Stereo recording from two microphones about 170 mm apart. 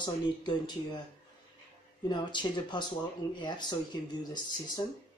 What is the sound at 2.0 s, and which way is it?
Speech, 25° left (ahead or behind).